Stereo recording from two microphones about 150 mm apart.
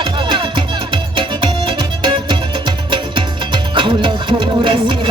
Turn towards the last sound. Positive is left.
turn(degrees=-35)  # may be behind; listen again after turning